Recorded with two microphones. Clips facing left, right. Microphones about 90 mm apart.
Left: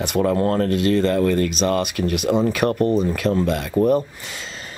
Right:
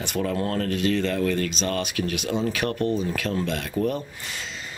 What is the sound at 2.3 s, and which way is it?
Speech, 35° left (ahead or behind).